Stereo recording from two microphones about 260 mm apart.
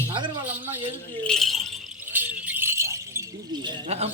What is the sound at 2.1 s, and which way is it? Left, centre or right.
Keys jangling, centre.